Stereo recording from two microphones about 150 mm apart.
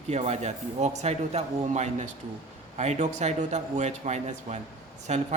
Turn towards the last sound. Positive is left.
turn(degrees=-45)  # may be behind; listen again after turning